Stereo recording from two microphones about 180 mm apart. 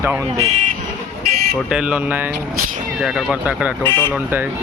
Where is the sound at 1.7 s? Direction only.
5° right (ahead or behind).